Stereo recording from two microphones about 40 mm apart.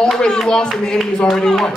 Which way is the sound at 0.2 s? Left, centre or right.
Centre.